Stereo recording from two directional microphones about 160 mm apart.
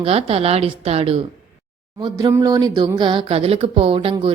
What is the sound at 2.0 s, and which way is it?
Speech, 20° right (ahead or behind).